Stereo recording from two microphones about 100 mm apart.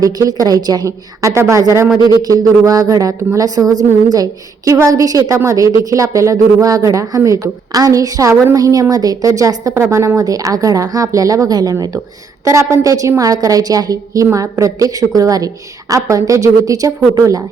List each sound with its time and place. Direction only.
0.0 s a woman's voice: 35° right (ahead or behind)